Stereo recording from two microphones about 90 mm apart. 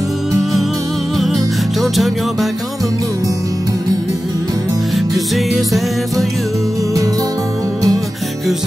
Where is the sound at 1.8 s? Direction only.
Centre (ahead or behind).